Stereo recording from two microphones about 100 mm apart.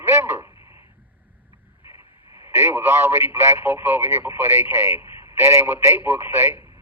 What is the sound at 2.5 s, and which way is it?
A man's voice, 25° right (ahead or behind).